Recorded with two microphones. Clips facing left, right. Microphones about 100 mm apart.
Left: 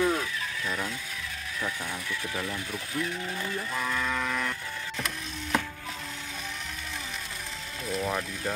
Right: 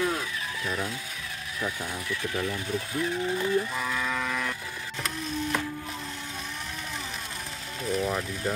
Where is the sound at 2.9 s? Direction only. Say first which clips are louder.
Right 3 dB; 20° right (ahead or behind).